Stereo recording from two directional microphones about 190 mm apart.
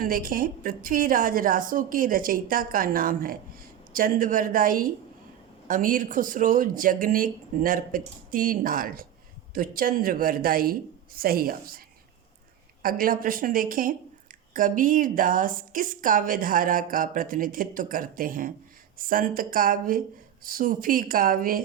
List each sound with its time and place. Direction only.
0.0 s a woman's voice: 50° right (ahead or behind)
12.8 s a woman's voice: 50° right (ahead or behind)